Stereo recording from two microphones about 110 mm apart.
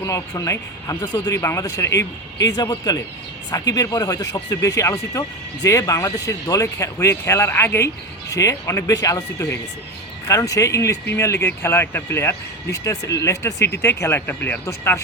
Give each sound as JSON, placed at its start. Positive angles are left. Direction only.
{"t": 0.0, "sound": "speech", "side_deg": 30}